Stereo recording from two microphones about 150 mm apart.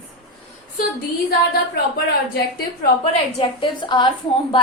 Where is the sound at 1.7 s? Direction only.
90° left.